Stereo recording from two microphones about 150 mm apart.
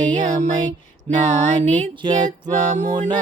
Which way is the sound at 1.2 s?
55° right (ahead or behind).